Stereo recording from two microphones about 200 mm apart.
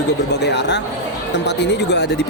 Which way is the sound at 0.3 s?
55° left (ahead or behind).